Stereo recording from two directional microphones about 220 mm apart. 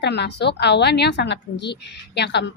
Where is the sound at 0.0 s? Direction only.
50° left (ahead or behind).